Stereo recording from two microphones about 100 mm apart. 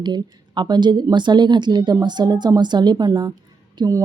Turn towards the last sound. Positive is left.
turn(degrees=-35)  # may be behind; listen again after turning